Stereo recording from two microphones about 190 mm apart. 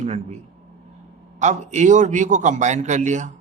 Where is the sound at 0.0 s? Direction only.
35° right (ahead or behind).